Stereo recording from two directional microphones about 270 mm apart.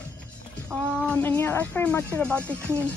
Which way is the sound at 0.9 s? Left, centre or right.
Centre.